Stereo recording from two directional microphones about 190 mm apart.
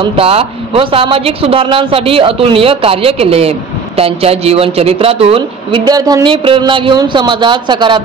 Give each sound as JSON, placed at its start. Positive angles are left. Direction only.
{"t": 0.0, "sound": "speech", "side_deg": -30}